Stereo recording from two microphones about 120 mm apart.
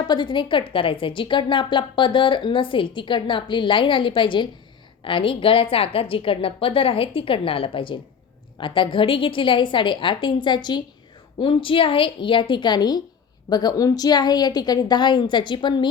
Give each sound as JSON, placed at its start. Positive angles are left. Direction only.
{"t": 0.1, "sound": "a woman's voice", "side_deg": 40}